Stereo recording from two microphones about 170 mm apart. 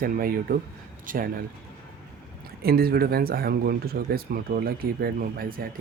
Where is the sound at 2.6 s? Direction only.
60° right (ahead or behind).